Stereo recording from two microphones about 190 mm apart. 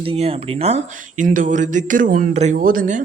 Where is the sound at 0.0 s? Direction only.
30° right (ahead or behind).